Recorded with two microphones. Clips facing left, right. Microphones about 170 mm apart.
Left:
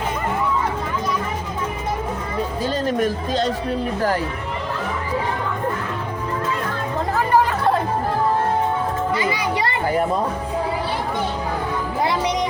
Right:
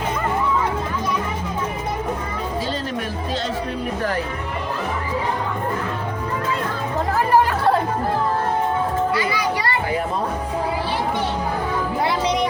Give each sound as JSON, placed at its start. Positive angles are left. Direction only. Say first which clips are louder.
{"t": 9.1, "sound": "children playing", "louder": "even", "side_deg": 20}